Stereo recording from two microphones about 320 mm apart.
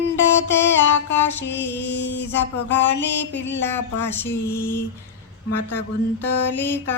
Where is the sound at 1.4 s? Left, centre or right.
Left.